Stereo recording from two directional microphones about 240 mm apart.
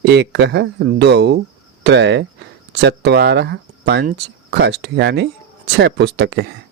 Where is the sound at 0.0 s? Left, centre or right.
Right.